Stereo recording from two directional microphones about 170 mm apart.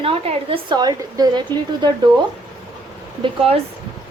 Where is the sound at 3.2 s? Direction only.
35° right (ahead or behind).